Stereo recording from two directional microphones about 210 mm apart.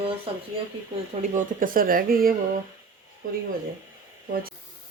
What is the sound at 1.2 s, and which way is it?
Speech, 40° right (ahead or behind).